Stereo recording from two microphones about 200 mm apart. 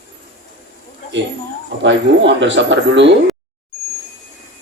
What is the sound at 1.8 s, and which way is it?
Speech, 65° right (ahead or behind).